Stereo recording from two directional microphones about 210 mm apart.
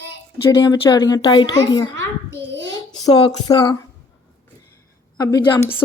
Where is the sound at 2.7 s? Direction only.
20° left (ahead or behind).